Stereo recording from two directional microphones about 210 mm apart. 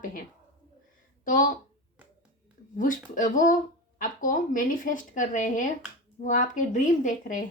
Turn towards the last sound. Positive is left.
turn(degrees=40)  # may be behind; listen again after turning